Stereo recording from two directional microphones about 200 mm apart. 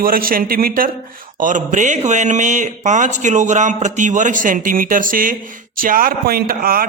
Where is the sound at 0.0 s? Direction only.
45° right (ahead or behind).